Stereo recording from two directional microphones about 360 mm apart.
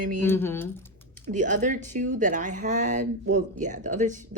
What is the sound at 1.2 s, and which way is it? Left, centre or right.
Speech, right.